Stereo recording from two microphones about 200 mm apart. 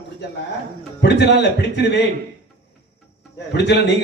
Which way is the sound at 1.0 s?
55° left (ahead or behind).